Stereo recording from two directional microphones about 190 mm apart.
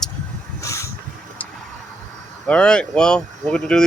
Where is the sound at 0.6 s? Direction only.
15° left (ahead or behind).